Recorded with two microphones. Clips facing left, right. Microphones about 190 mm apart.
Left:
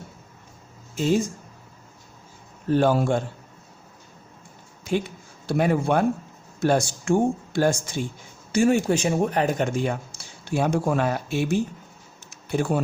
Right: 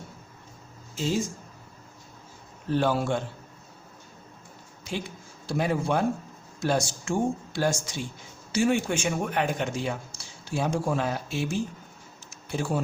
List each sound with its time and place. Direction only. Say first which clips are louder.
0.9 s speech: left 6 dB; 55° left (ahead or behind)
2.6 s a man's voice: left 5 dB; 45° left (ahead or behind)
5.5 s speech: left 5 dB; 60° left (ahead or behind)
12.3 s typing: left 5 dB; 60° left (ahead or behind)